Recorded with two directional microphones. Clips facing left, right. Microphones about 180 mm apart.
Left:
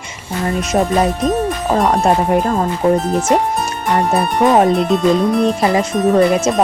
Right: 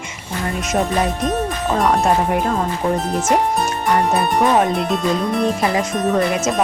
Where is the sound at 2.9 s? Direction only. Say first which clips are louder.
Left 3 dB; centre (ahead or behind).